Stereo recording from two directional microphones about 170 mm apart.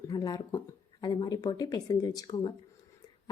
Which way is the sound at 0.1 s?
20° left (ahead or behind).